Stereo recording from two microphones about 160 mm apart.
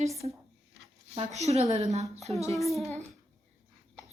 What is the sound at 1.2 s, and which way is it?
Speech, 40° right (ahead or behind).